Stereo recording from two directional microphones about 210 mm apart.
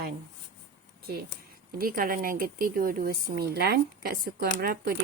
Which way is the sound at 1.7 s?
45° right (ahead or behind).